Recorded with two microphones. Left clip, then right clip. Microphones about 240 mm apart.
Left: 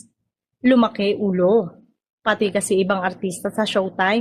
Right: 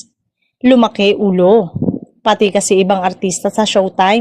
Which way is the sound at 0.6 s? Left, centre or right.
Right.